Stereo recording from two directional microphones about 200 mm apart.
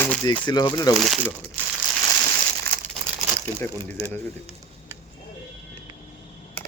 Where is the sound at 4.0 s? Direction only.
30° right (ahead or behind).